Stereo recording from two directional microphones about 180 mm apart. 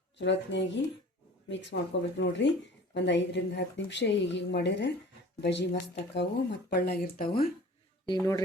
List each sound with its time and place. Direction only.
0.2 s speech: 75° left (ahead or behind); by 7.5 s 55° left (ahead or behind)